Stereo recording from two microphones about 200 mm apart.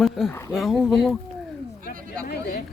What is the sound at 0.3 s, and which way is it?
Speech, 15° left (ahead or behind).